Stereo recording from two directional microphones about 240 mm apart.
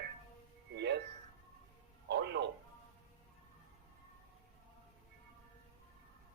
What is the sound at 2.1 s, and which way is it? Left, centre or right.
Speech, right.